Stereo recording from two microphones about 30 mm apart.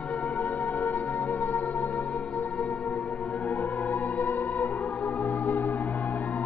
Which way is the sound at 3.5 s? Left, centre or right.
Left.